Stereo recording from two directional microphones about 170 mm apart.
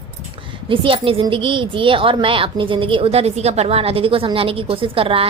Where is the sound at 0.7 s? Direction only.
30° right (ahead or behind).